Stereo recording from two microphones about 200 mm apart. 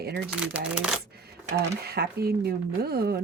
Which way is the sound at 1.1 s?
50° right (ahead or behind).